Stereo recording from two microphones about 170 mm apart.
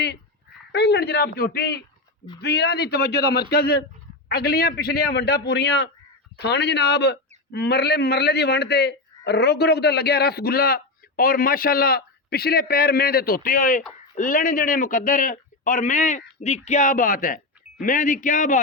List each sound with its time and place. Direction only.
0.7 s a man's voice: 75° left (ahead or behind); by 18.6 s 50° left (ahead or behind)